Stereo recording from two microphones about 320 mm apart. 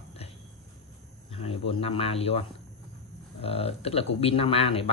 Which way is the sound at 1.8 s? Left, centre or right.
Centre.